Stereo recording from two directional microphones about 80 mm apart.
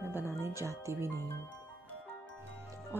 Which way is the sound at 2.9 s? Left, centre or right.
Right.